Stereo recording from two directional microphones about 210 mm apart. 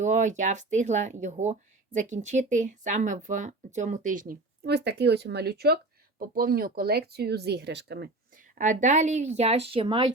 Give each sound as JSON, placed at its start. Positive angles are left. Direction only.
{"t": 0.0, "sound": "speech", "side_deg": -35}
{"t": 8.5, "sound": "speech", "side_deg": -35}